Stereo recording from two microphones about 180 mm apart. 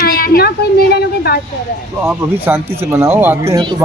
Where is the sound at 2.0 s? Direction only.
15° right (ahead or behind).